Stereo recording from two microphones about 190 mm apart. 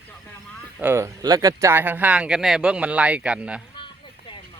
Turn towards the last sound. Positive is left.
turn(degrees=-5)  # may be behind; listen again after turning